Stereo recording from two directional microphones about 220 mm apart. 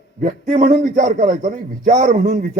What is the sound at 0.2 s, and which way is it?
A man's voice, 35° right (ahead or behind).